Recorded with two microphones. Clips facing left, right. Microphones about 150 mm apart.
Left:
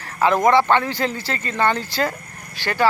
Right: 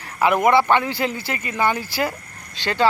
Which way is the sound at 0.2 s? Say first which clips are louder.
Left 1 dB; 10° right (ahead or behind).